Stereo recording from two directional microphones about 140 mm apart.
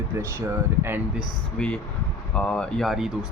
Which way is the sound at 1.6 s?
10° left (ahead or behind).